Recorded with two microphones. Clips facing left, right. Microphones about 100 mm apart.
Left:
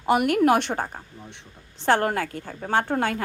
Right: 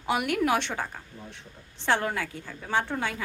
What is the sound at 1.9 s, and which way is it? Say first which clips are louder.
A woman's voice: left 5 dB; 50° left (ahead or behind).